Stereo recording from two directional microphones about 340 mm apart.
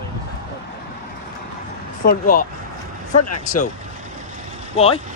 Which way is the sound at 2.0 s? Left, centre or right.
Left.